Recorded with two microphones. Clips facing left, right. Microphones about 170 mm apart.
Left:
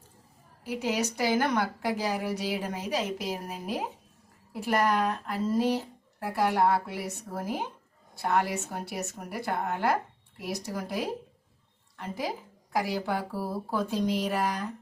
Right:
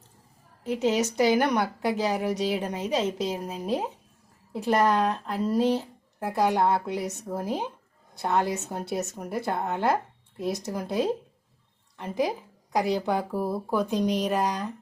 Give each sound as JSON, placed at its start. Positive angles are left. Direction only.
{"t": 0.6, "sound": "a woman's voice", "side_deg": -20}